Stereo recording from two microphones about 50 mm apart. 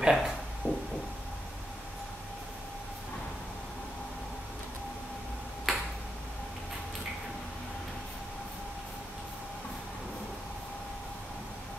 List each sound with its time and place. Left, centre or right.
0.0 s speech: centre
0.6 s heart murmur: right
5.7 s finger snapping: centre